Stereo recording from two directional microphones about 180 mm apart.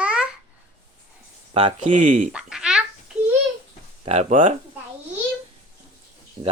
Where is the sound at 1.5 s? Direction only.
35° right (ahead or behind).